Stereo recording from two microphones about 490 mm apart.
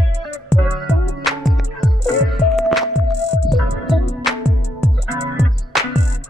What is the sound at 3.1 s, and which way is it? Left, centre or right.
Music, left.